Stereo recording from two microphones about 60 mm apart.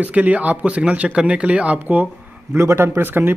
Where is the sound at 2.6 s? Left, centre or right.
Right.